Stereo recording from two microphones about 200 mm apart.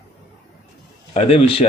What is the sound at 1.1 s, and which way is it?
Speech, 30° left (ahead or behind).